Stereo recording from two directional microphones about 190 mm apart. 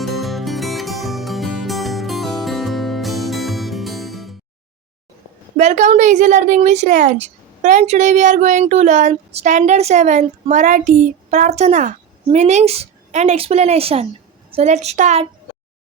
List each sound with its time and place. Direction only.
0.0 s music: centre (ahead or behind)
5.5 s a woman's voice: 40° right (ahead or behind)